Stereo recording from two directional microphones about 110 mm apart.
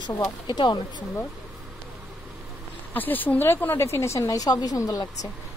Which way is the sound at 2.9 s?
15° left (ahead or behind).